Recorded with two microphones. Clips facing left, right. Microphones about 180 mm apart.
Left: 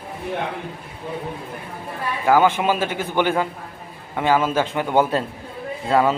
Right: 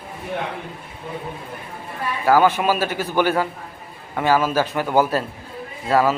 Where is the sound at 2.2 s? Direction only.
20° left (ahead or behind).